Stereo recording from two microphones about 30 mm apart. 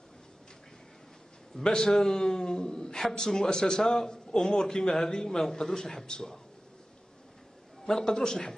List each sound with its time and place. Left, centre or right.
1.6 s a man's voice: left
1.9 s a man's voice: centre
5.5 s a man's voice: centre
5.8 s a man's voice: left
7.8 s a man's voice: left